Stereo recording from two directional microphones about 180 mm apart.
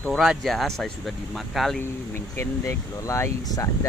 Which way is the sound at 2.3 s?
15° left (ahead or behind).